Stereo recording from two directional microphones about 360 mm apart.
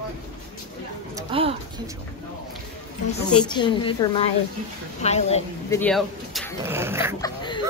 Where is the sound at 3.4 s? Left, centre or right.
Centre.